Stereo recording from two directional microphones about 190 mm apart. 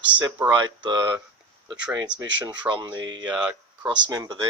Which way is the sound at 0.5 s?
25° right (ahead or behind).